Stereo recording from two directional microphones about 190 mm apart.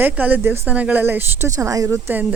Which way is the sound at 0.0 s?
10° right (ahead or behind).